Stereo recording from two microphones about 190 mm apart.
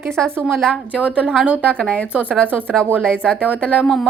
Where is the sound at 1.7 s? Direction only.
5° left (ahead or behind).